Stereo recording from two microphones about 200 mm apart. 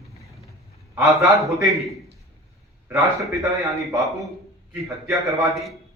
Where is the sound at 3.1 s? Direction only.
15° right (ahead or behind).